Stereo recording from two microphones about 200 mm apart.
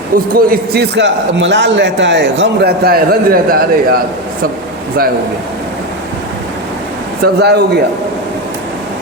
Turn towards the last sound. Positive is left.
turn(degrees=-55)  # may be behind; listen again after turning